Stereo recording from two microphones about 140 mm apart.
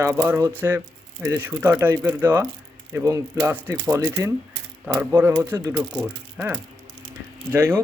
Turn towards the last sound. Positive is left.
turn(degrees=-15)  # may be behind; listen again after turning